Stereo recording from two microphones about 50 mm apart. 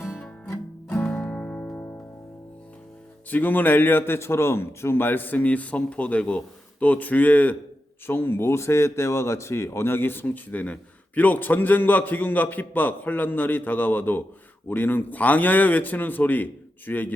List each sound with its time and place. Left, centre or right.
0.9 s music: left
1.6 s music: left
3.2 s speech: left
8.0 s speech: left